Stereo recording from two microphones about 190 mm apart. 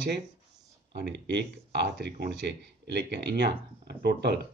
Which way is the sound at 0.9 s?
60° right (ahead or behind).